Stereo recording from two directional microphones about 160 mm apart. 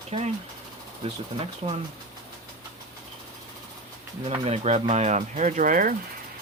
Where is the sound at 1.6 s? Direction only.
35° right (ahead or behind).